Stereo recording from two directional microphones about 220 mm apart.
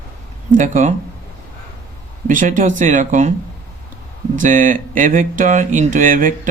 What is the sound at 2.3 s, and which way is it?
Speech, 35° right (ahead or behind).